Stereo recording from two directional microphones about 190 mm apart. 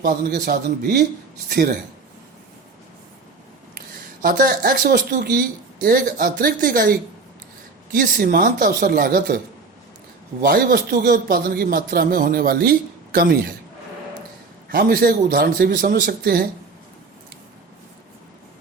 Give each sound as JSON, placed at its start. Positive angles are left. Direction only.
{"t": 0.3, "sound": "speech", "side_deg": -55}
{"t": 3.8, "sound": "speech", "side_deg": -50}
{"t": 10.4, "sound": "speech", "side_deg": -55}
{"t": 14.7, "sound": "speech", "side_deg": -50}